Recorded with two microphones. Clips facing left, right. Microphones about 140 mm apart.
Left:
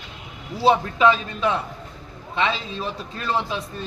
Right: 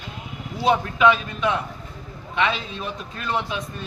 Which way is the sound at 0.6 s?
30° left (ahead or behind).